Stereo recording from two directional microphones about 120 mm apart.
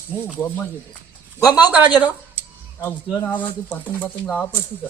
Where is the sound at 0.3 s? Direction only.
15° left (ahead or behind).